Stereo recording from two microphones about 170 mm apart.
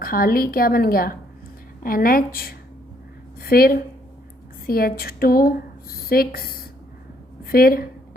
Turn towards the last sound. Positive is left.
turn(degrees=60)  # may be behind; listen again after turning